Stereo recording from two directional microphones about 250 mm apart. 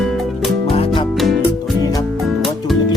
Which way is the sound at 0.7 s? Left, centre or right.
Left.